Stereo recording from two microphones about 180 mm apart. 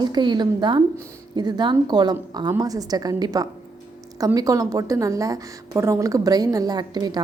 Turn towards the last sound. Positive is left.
turn(degrees=-20)  # may be behind; listen again after turning